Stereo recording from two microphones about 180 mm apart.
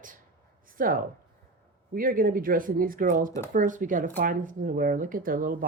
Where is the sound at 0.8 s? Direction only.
50° right (ahead or behind).